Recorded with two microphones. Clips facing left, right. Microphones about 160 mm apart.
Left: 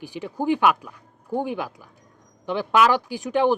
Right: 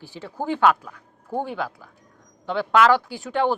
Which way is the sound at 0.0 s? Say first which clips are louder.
Left 4 dB; 15° left (ahead or behind).